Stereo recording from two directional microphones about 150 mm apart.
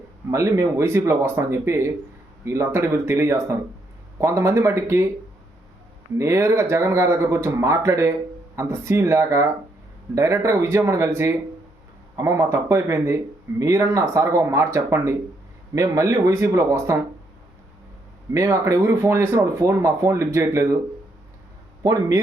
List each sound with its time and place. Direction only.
0.3 s speech: 20° right (ahead or behind)
6.1 s speech: 20° right (ahead or behind)
18.3 s speech: 20° right (ahead or behind)